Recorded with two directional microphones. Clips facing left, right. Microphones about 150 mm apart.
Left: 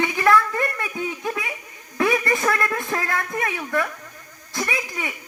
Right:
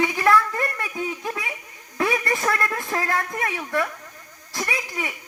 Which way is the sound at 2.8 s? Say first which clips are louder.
Right 1 dB; 35° right (ahead or behind).